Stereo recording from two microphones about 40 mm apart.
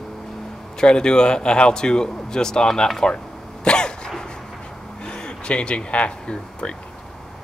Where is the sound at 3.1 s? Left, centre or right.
Left.